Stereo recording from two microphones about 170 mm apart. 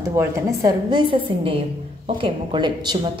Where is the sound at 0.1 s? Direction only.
20° right (ahead or behind).